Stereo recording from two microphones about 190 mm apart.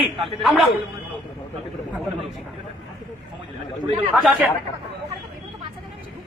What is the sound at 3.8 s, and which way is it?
Speech, 30° right (ahead or behind).